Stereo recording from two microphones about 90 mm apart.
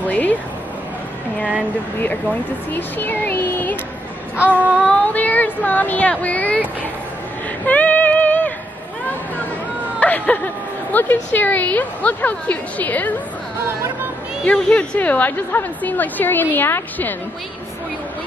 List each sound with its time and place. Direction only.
0.0 s speech: 15° left (ahead or behind)
2.7 s speech: 20° left (ahead or behind)
4.4 s child singing: 15° right (ahead or behind)
4.8 s a woman's voice: 15° left (ahead or behind)
7.6 s music: 15° left (ahead or behind)
9.9 s a woman's voice: 20° left (ahead or behind)
14.4 s a woman's voice: 10° left (ahead or behind)